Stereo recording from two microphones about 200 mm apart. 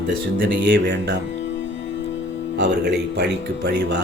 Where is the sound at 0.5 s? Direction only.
60° right (ahead or behind).